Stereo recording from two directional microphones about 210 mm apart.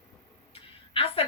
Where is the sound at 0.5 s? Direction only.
25° left (ahead or behind).